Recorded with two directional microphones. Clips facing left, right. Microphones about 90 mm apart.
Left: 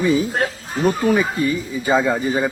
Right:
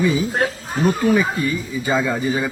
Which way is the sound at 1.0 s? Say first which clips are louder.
Even; 35° left (ahead or behind).